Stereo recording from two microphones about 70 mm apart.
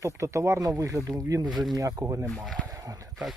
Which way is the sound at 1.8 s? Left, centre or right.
Right.